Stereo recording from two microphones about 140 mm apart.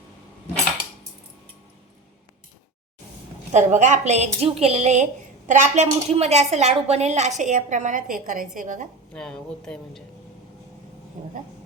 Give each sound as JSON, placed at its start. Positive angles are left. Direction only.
{"t": 3.5, "sound": "a woman's voice", "side_deg": -60}
{"t": 9.1, "sound": "speech", "side_deg": 5}
{"t": 11.2, "sound": "speech", "side_deg": -60}